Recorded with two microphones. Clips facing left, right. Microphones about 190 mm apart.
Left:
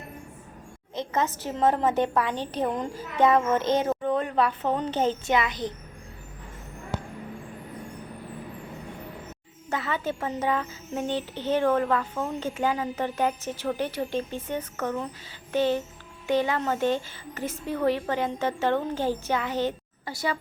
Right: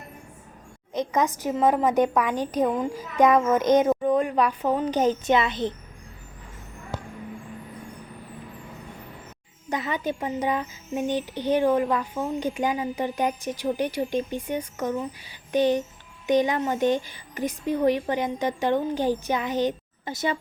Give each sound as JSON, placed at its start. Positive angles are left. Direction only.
{"t": 0.9, "sound": "speech", "side_deg": -15}
{"t": 9.6, "sound": "speech", "side_deg": -15}